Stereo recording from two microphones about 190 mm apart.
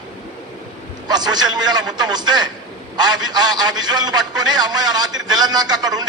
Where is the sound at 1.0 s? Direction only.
20° right (ahead or behind).